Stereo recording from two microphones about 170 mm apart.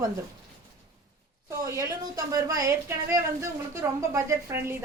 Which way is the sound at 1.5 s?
15° right (ahead or behind).